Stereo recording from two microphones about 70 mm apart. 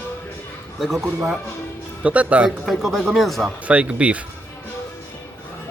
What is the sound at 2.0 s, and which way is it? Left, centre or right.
Speech, centre.